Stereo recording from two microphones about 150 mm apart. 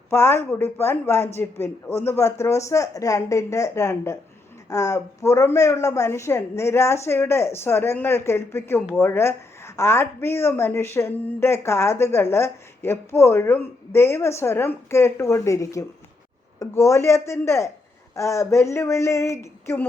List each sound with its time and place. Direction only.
0.1 s a woman's voice: 15° left (ahead or behind)